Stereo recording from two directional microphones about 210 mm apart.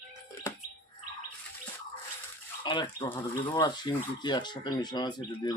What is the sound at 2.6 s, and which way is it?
Speech, 20° left (ahead or behind).